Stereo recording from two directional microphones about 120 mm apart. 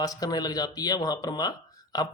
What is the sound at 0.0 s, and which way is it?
A man's voice, 30° left (ahead or behind).